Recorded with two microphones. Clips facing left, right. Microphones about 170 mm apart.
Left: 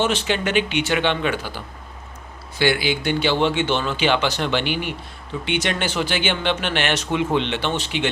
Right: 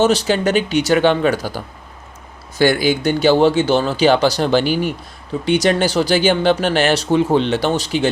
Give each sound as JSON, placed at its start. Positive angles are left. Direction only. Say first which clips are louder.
{"t": 0.0, "sound": "speech", "louder": "right 7 dB", "side_deg": -40}